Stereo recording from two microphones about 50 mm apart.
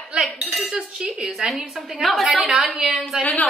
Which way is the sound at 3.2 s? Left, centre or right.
Left.